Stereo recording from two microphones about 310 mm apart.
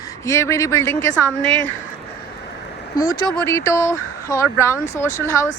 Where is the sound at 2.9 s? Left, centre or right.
Centre.